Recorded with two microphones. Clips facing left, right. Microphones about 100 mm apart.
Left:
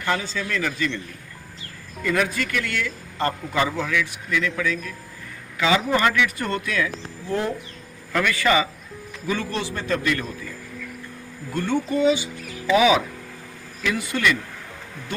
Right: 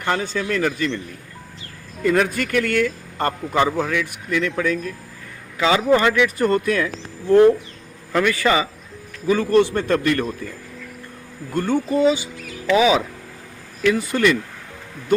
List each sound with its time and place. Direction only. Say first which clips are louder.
0.2 s speech: right 5 dB; 50° right (ahead or behind)
2.0 s speech: right 4 dB; 40° right (ahead or behind)
5.5 s speech: right 4 dB; 30° right (ahead or behind)
8.1 s a man's voice: right 2 dB; 30° right (ahead or behind); by 10.2 s 50° right (ahead or behind)
11.5 s a man's voice: right 3 dB; 45° right (ahead or behind)